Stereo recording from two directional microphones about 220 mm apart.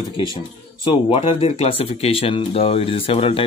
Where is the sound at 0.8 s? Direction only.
25° left (ahead or behind).